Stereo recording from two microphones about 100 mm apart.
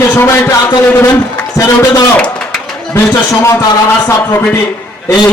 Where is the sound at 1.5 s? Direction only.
30° left (ahead or behind).